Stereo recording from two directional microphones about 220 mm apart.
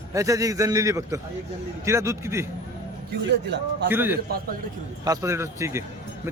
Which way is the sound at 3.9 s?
10° right (ahead or behind).